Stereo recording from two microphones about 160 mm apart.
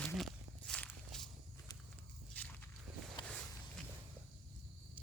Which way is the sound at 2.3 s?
10° left (ahead or behind).